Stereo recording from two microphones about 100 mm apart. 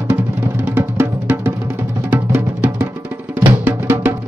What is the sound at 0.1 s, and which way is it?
Music, 15° right (ahead or behind).